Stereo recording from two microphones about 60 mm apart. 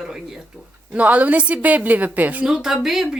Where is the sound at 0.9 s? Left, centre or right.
Right.